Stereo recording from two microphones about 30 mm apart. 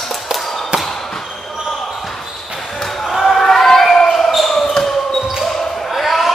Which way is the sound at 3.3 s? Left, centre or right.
Centre.